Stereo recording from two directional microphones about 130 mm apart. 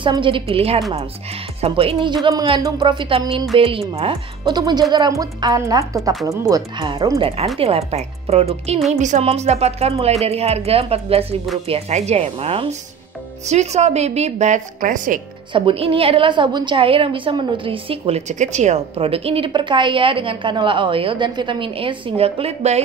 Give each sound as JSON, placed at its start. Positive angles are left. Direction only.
{"t": 0.0, "sound": "a woman's voice", "side_deg": -40}
{"t": 7.2, "sound": "a woman's voice", "side_deg": -45}
{"t": 8.9, "sound": "a woman's voice", "side_deg": -70}
{"t": 9.2, "sound": "a woman's voice", "side_deg": -50}
{"t": 13.5, "sound": "a woman's voice", "side_deg": -60}
{"t": 15.5, "sound": "a woman's voice", "side_deg": -45}
{"t": 18.3, "sound": "a woman's voice", "side_deg": -65}